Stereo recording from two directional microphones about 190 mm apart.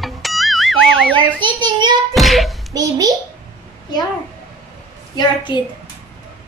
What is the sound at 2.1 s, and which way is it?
Speech, centre (ahead or behind).